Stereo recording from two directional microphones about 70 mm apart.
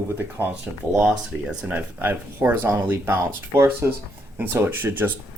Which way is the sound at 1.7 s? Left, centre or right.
Right.